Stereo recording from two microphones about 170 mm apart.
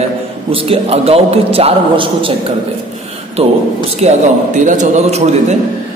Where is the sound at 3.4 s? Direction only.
35° right (ahead or behind).